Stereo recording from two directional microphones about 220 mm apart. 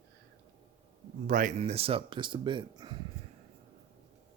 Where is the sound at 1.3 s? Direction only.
35° right (ahead or behind); by 3.0 s 20° right (ahead or behind).